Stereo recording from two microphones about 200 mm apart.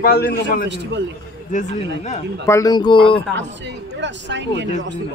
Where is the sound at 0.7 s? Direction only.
65° right (ahead or behind).